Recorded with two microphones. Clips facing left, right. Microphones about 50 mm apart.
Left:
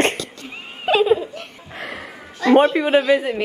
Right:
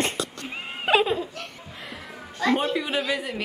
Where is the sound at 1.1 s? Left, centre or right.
Centre.